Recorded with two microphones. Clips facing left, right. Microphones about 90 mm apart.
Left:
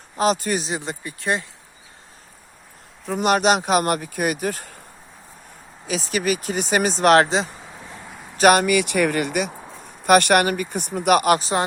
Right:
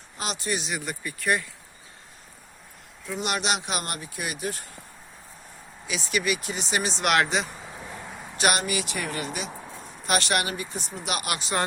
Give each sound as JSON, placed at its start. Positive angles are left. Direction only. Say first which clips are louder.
{"t": 0.2, "sound": "speech", "louder": "left 10 dB", "side_deg": 45}
{"t": 0.7, "sound": "speech", "louder": "left 4 dB", "side_deg": 25}
{"t": 3.1, "sound": "speech", "louder": "left 10 dB", "side_deg": 45}
{"t": 5.8, "sound": "speech", "louder": "left 4 dB", "side_deg": 40}
{"t": 7.5, "sound": "a sound", "louder": "even", "side_deg": 0}
{"t": 8.4, "sound": "speech", "louder": "left 10 dB", "side_deg": 45}
{"t": 8.6, "sound": "speech", "louder": "left 11 dB", "side_deg": 65}
{"t": 9.5, "sound": "a sound", "louder": "left 1 dB", "side_deg": 10}
{"t": 10.0, "sound": "speech", "louder": "left 10 dB", "side_deg": 55}